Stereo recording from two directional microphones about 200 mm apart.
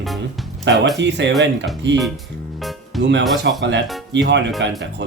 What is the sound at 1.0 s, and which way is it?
Speech, 60° right (ahead or behind).